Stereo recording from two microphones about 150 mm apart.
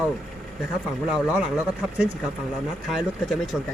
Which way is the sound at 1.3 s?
5° right (ahead or behind).